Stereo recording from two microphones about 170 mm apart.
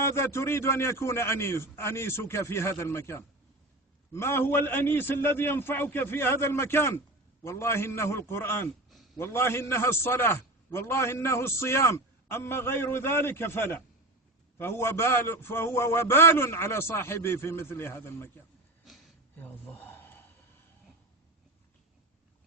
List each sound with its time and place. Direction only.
0.0 s a man's voice: 15° left (ahead or behind)
19.4 s gasp: 10° left (ahead or behind)